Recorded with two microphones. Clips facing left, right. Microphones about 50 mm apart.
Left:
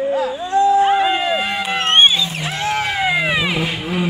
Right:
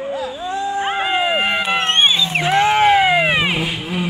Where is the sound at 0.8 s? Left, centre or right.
Right.